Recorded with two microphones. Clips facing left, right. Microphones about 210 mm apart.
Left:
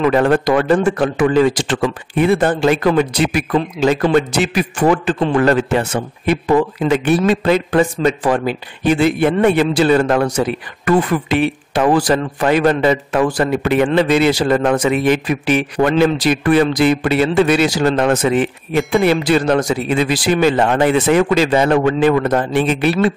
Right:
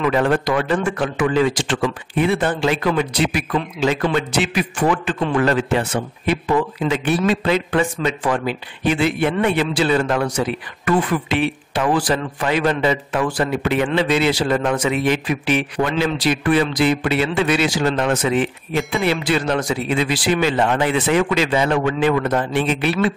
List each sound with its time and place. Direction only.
0.0 s a man's voice: 45° left (ahead or behind)